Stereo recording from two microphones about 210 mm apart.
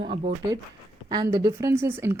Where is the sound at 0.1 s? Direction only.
25° right (ahead or behind).